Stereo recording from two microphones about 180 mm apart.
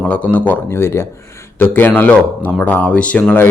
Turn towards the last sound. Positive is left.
turn(degrees=10)  # may be behind; listen again after turning